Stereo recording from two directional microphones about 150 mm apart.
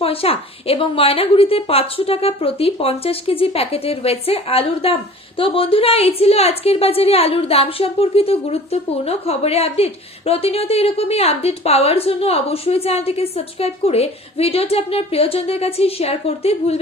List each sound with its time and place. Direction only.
0.0 s a woman's voice: 40° left (ahead or behind)